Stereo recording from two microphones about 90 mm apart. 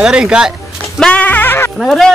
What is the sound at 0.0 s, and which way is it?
Speech, 10° right (ahead or behind).